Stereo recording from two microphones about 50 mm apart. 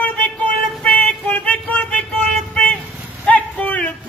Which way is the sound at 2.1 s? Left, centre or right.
Centre.